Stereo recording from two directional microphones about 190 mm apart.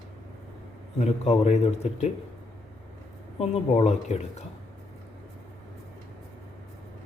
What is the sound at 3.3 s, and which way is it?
A man's voice, 35° left (ahead or behind).